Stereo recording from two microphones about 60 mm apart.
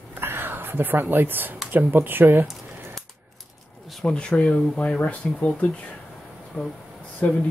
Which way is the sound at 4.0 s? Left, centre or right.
Centre.